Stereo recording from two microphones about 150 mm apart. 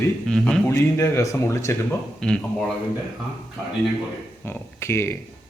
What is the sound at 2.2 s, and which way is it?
Speech, 5° left (ahead or behind).